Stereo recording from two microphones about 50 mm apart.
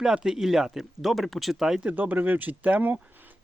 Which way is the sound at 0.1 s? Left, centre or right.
Centre.